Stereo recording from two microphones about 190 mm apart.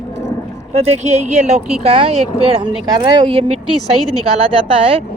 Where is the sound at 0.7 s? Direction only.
35° right (ahead or behind).